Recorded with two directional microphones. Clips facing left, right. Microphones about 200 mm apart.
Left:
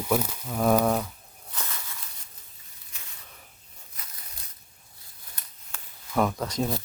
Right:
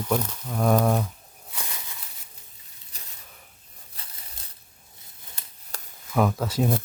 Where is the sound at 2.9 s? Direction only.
35° right (ahead or behind).